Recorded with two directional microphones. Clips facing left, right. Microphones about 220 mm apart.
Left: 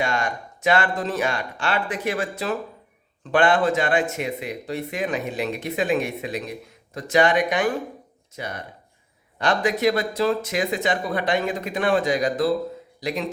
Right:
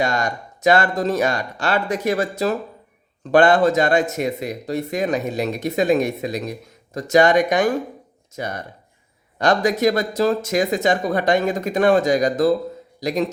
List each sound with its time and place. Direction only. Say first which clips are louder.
0.0 s speech: right 3 dB; 40° right (ahead or behind)